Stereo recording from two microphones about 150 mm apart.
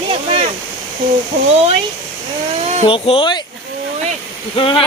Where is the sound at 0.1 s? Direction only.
40° right (ahead or behind).